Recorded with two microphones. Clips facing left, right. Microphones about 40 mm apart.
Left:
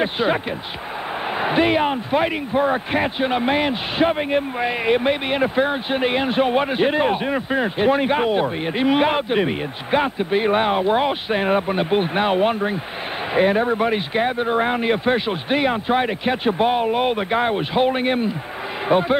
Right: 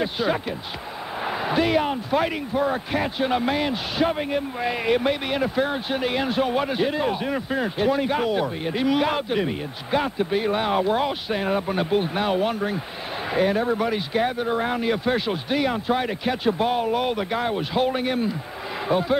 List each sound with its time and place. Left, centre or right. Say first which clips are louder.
0.0 s a man's voice: left 4 dB; left